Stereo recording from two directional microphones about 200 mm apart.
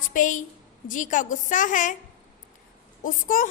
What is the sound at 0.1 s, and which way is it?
A woman's voice, 40° left (ahead or behind).